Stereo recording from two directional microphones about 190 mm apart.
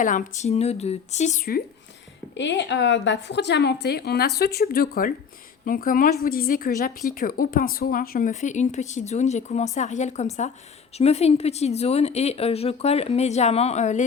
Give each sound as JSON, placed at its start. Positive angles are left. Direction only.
{"t": 0.0, "sound": "speech", "side_deg": 45}
{"t": 2.3, "sound": "a woman's voice", "side_deg": 70}